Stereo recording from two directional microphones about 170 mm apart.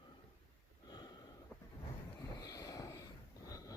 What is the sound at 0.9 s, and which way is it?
Sniff, 25° left (ahead or behind).